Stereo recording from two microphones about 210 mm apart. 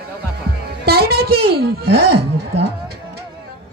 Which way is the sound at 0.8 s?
50° right (ahead or behind).